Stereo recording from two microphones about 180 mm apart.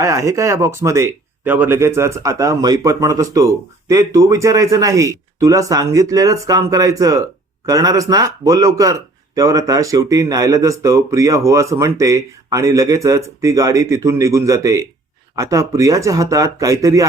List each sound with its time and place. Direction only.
0.0 s speech: 15° right (ahead or behind)